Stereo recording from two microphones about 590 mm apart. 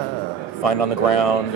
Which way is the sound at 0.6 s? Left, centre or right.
Left.